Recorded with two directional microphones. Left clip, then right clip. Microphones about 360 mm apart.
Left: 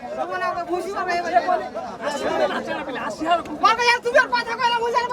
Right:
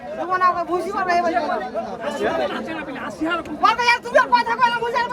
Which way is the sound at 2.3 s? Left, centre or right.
Left.